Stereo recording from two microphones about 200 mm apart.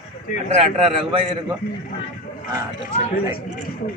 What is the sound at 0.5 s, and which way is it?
Speech, 30° right (ahead or behind).